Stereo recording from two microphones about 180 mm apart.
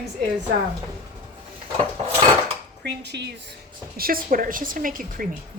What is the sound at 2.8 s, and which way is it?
Speech, 70° right (ahead or behind).